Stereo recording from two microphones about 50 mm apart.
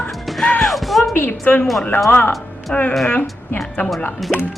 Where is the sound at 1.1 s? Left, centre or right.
Left.